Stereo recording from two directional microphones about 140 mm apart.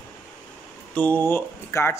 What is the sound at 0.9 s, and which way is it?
Speech, 10° left (ahead or behind).